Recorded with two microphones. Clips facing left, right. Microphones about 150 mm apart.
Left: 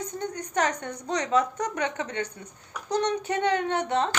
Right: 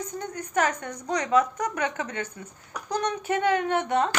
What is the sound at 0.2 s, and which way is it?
A woman's voice, 30° left (ahead or behind).